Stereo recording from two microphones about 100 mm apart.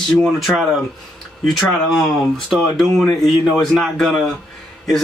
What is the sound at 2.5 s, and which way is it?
Speech, centre (ahead or behind).